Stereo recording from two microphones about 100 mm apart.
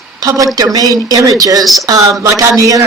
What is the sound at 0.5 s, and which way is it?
Speech, 40° right (ahead or behind).